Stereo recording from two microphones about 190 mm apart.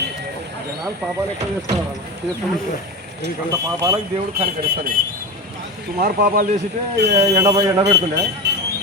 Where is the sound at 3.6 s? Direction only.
15° right (ahead or behind).